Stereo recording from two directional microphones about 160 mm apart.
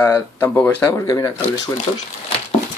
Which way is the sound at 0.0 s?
10° left (ahead or behind).